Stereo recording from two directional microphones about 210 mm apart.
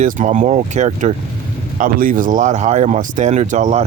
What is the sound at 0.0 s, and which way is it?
Speech, 35° right (ahead or behind).